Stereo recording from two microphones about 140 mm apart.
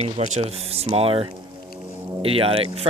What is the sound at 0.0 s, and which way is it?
Speech, 50° right (ahead or behind).